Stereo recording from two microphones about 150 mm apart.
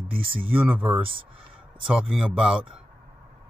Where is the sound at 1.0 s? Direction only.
35° right (ahead or behind).